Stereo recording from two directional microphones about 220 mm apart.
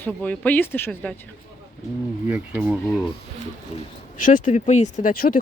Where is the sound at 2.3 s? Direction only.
5° right (ahead or behind).